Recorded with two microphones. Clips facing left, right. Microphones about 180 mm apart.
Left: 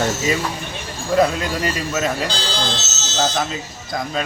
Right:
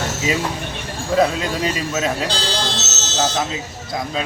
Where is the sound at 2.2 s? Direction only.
70° right (ahead or behind).